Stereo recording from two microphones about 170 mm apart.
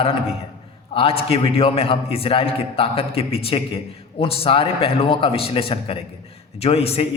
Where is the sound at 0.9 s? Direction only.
35° left (ahead or behind).